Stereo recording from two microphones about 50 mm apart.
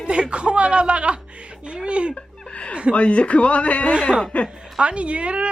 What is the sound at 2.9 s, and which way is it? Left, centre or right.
A man's voice, left.